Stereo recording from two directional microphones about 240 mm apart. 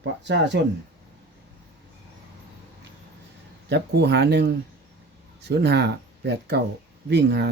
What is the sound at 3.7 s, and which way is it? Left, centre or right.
Speech, right.